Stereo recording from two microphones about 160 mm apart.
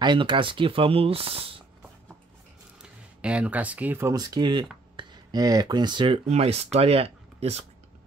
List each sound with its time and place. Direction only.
0.0 s speech: 30° right (ahead or behind)
2.8 s speech: 5° right (ahead or behind); by 7.6 s 40° right (ahead or behind)